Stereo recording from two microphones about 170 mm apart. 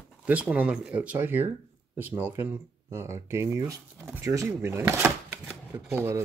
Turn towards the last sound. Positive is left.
turn(degrees=-15)  # may be behind; listen again after turning